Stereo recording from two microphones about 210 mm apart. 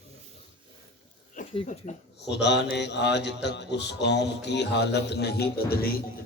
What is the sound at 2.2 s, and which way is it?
Speech, 55° left (ahead or behind).